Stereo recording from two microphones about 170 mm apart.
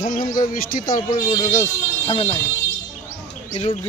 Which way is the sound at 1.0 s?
25° left (ahead or behind).